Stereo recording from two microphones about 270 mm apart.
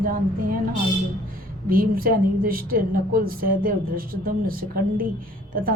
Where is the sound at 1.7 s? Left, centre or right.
Right.